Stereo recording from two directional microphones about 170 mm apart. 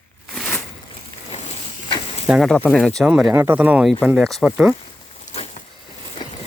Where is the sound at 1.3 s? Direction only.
35° left (ahead or behind).